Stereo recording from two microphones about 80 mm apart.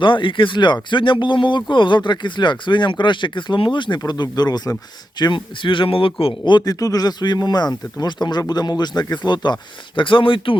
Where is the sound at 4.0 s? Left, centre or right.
Left.